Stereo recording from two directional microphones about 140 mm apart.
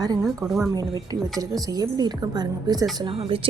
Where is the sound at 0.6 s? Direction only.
25° right (ahead or behind).